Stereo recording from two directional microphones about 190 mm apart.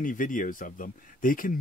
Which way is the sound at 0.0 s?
45° left (ahead or behind).